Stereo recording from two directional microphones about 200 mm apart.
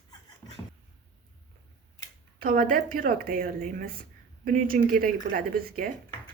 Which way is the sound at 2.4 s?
45° right (ahead or behind).